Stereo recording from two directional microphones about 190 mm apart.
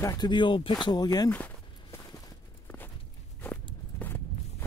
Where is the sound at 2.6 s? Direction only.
10° left (ahead or behind).